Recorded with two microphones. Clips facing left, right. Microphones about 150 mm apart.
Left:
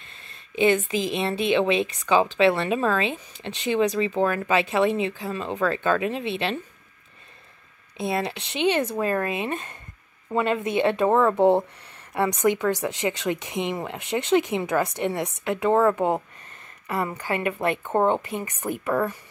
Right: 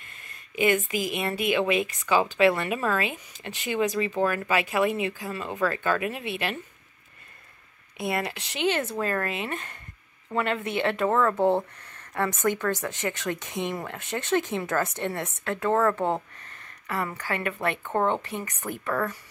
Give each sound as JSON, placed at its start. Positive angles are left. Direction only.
{"t": 0.0, "sound": "a sound", "side_deg": 25}
{"t": 0.8, "sound": "a woman's voice", "side_deg": 25}
{"t": 8.0, "sound": "a woman's voice", "side_deg": 20}